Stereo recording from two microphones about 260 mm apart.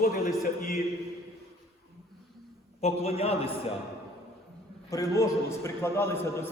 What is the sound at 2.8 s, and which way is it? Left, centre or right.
Speech, left.